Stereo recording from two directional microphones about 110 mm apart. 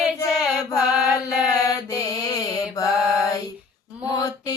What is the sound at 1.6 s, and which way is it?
Mantra, 30° left (ahead or behind).